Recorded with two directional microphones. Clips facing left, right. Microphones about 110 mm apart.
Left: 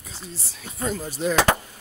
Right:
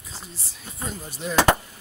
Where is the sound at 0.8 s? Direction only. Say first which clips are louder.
Left 7 dB; 90° left.